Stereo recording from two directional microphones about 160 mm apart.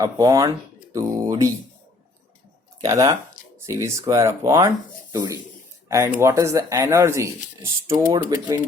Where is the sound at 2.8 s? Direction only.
20° right (ahead or behind).